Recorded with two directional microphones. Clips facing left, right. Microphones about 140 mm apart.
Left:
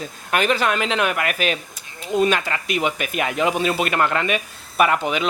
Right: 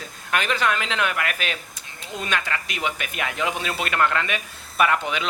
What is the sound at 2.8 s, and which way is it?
Speech, 30° left (ahead or behind).